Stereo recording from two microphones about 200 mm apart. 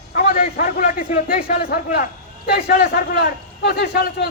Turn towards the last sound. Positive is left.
turn(degrees=55)  # may be behind; listen again after turning